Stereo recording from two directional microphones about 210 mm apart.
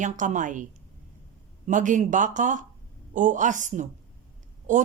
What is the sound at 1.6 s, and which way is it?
A woman's voice, 35° right (ahead or behind).